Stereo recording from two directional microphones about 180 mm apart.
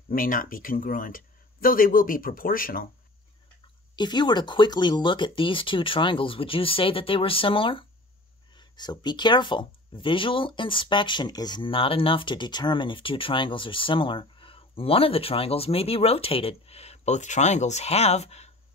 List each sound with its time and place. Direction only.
0.1 s speech: 50° left (ahead or behind)
3.9 s speech: 25° left (ahead or behind)